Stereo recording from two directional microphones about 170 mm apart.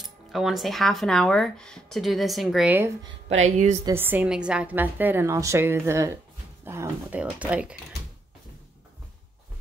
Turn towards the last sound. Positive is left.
turn(degrees=-10)  # may be behind; listen again after turning